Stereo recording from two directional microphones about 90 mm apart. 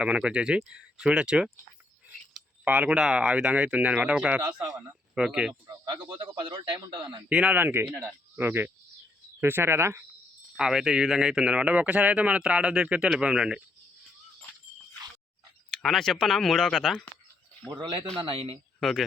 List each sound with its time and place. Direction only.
0.0 s speech: 10° right (ahead or behind)
2.6 s speech: 15° right (ahead or behind)
6.1 s a man's voice: 70° right (ahead or behind)
7.3 s a man's voice: 15° right (ahead or behind)
10.6 s speech: 5° right (ahead or behind)
15.7 s speech: 5° left (ahead or behind)
17.7 s speech: 70° right (ahead or behind)
18.2 s a man's voice: 85° right
18.8 s speech: centre (ahead or behind)